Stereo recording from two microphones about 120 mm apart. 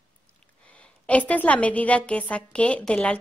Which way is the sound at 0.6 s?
10° left (ahead or behind).